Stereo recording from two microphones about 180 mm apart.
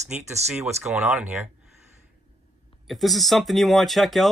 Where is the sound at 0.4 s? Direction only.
35° right (ahead or behind).